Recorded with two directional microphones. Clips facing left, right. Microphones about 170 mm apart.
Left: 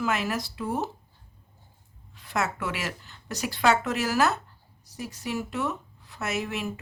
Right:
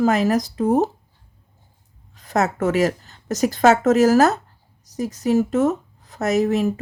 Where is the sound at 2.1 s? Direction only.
40° right (ahead or behind).